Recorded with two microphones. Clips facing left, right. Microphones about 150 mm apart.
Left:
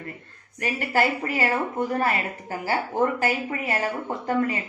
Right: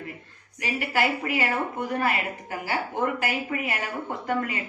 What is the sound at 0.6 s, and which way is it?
Speech, 40° left (ahead or behind).